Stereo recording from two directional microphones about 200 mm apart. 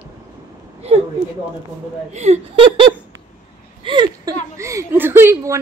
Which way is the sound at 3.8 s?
25° right (ahead or behind).